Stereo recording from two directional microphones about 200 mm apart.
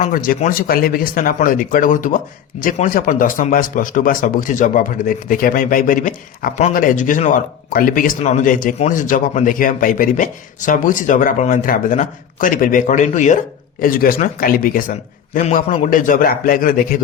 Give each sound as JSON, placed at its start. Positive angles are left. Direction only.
{"t": 0.0, "sound": "speech", "side_deg": 45}